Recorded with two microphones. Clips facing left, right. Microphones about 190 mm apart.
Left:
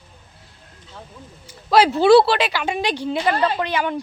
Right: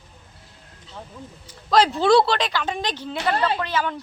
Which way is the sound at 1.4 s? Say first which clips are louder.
Left 3 dB; 10° left (ahead or behind).